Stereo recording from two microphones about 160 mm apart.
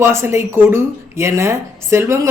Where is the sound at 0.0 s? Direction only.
15° right (ahead or behind).